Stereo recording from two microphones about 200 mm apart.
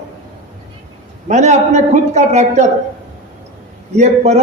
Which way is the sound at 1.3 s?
35° right (ahead or behind).